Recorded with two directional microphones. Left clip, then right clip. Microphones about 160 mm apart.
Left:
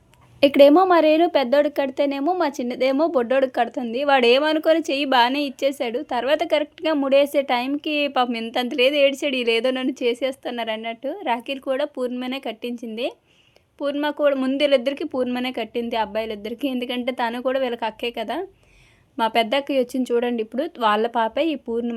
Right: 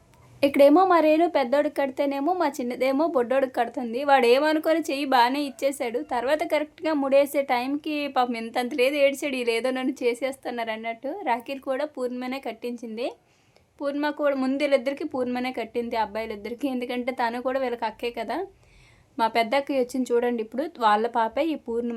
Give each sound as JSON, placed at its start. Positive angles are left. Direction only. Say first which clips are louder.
{"t": 0.3, "sound": "speech", "louder": "left 4 dB", "side_deg": 30}